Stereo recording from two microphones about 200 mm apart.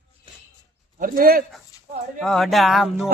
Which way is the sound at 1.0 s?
45° right (ahead or behind).